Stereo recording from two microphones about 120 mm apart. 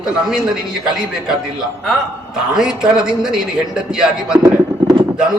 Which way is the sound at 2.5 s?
5° right (ahead or behind).